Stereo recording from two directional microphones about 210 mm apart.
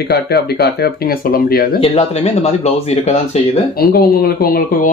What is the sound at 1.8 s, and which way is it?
Speech, 30° left (ahead or behind).